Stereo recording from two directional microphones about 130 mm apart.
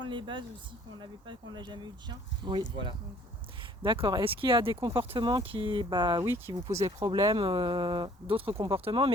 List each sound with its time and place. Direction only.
0.0 s speech: 40° right (ahead or behind)
6.2 s speech: 20° right (ahead or behind); by 9.1 s 45° right (ahead or behind)